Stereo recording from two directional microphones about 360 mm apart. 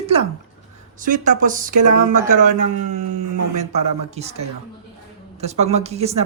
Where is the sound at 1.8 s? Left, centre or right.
Right.